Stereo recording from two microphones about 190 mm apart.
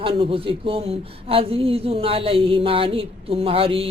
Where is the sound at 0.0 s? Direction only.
30° right (ahead or behind).